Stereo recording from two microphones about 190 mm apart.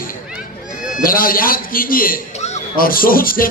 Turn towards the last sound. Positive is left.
turn(degrees=50)  # may be behind; listen again after turning